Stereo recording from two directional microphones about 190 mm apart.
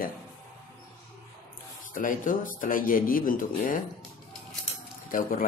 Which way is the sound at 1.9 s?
45° left (ahead or behind).